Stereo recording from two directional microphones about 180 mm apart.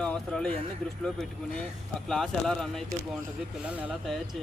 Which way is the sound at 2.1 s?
Centre (ahead or behind).